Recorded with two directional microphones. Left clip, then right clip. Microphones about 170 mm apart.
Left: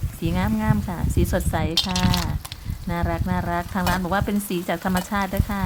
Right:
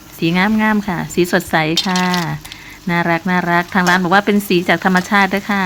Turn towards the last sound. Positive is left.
turn(degrees=-15)  # may be behind; listen again after turning